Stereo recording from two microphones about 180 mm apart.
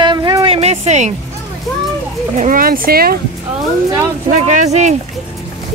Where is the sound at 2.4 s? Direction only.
50° right (ahead or behind).